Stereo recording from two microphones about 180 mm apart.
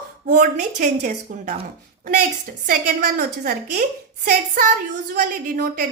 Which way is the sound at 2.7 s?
50° right (ahead or behind).